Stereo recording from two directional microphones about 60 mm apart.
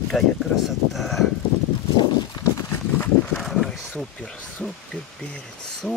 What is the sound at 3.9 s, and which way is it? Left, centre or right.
Speech, left.